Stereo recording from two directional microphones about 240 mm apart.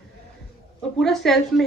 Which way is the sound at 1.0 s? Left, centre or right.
Centre.